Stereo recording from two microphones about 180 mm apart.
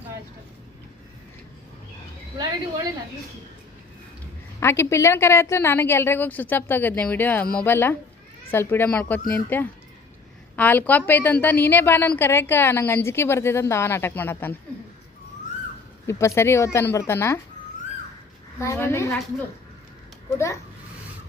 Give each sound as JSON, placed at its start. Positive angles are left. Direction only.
{"t": 2.4, "sound": "a woman's voice", "side_deg": -20}
{"t": 4.6, "sound": "a woman's voice", "side_deg": 15}
{"t": 16.0, "sound": "a woman's voice", "side_deg": 15}
{"t": 18.6, "sound": "a woman's voice", "side_deg": 15}